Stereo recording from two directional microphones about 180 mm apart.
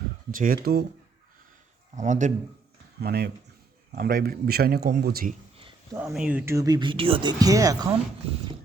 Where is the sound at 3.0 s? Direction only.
60° right (ahead or behind).